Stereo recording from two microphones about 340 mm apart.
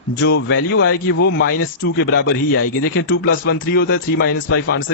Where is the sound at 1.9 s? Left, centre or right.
Left.